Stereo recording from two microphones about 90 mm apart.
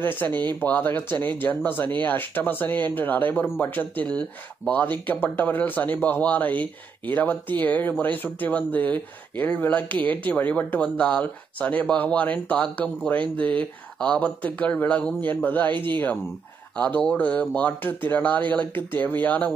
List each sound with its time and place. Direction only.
0.0 s speech: 20° left (ahead or behind)
15.7 s speech: 60° right (ahead or behind)
16.7 s speech: 15° left (ahead or behind)